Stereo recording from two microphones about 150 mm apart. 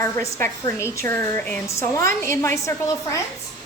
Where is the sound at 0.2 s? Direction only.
20° left (ahead or behind).